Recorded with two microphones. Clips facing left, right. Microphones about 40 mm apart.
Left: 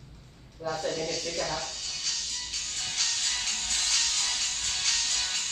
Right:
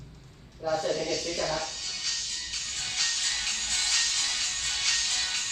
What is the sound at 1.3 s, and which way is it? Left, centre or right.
Speech, right.